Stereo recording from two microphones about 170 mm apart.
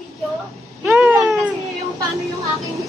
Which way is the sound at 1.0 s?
Centre (ahead or behind).